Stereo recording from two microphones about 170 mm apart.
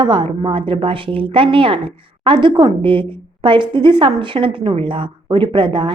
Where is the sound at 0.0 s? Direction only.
30° right (ahead or behind).